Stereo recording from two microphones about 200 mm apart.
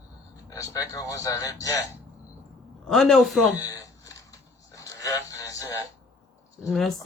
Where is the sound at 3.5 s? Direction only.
15° left (ahead or behind).